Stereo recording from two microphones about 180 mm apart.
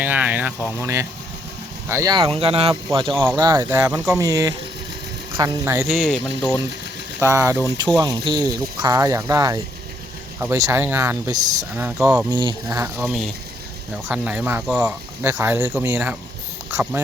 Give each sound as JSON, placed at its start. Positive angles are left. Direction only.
{"t": 0.0, "sound": "speech", "side_deg": -10}
{"t": 5.8, "sound": "speech", "side_deg": 0}
{"t": 7.2, "sound": "speech", "side_deg": -15}
{"t": 12.3, "sound": "speech", "side_deg": -25}